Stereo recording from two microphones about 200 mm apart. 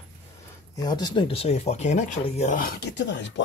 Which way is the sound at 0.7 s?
20° left (ahead or behind).